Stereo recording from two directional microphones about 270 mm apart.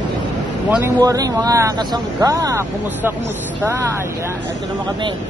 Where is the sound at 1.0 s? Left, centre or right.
Centre.